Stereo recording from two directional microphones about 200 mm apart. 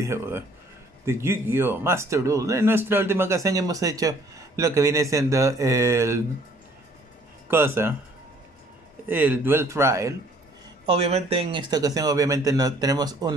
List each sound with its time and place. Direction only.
0.0 s speech: 10° right (ahead or behind)
7.4 s a man's voice: 10° right (ahead or behind)
9.0 s speech: 10° right (ahead or behind)
10.9 s speech: 30° right (ahead or behind)